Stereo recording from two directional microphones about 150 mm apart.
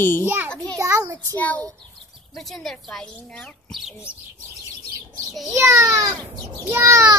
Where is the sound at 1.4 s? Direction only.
10° left (ahead or behind).